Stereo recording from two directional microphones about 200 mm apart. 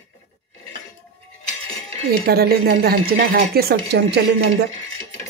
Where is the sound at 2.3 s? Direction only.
50° right (ahead or behind).